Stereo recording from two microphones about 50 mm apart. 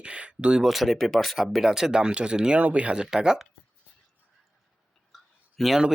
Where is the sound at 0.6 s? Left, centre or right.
Centre.